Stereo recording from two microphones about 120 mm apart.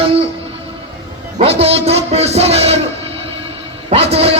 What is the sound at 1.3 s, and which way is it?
A man's voice, 55° right (ahead or behind).